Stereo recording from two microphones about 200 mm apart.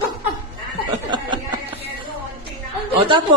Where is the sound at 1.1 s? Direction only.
25° right (ahead or behind).